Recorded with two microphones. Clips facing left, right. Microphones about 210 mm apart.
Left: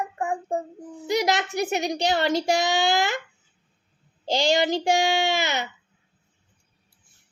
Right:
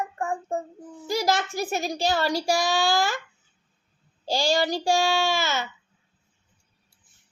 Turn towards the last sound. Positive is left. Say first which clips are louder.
# left 1 dB
turn(degrees=20)  # may be behind; listen again after turning